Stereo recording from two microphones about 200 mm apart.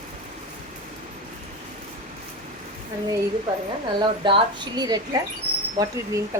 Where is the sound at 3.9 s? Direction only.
25° right (ahead or behind).